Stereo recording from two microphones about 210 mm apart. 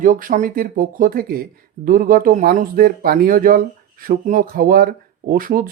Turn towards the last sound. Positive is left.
turn(degrees=-40)  # may be behind; listen again after turning